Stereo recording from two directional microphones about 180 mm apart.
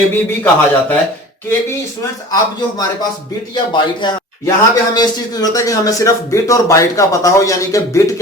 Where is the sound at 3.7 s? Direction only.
25° left (ahead or behind).